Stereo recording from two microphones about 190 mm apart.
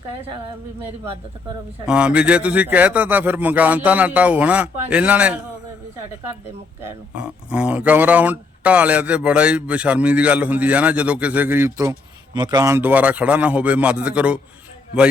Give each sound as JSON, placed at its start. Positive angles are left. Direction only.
{"t": 1.9, "sound": "speech", "side_deg": -5}
{"t": 7.2, "sound": "speech", "side_deg": -5}